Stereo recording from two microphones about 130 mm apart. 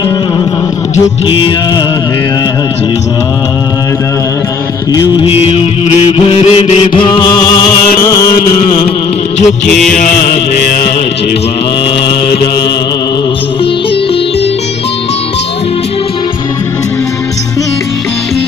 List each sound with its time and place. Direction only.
5.1 s music: 45° left (ahead or behind); by 8.4 s 25° left (ahead or behind)